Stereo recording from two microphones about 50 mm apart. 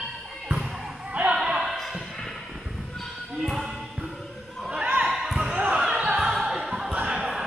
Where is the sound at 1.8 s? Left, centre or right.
Centre.